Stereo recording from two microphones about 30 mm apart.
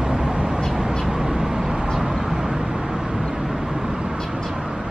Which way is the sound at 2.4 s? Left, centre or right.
Right.